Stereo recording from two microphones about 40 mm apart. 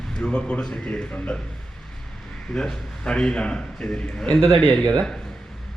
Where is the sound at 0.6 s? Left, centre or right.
Centre.